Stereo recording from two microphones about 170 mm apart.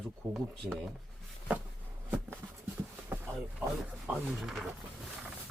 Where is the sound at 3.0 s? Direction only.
15° right (ahead or behind).